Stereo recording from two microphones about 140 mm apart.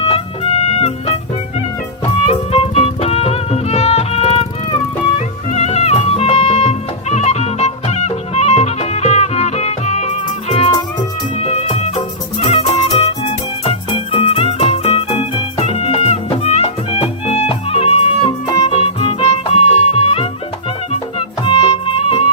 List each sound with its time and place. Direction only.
0.0 s music: 45° left (ahead or behind)
2.2 s music: 50° left (ahead or behind)
11.3 s music: 45° left (ahead or behind)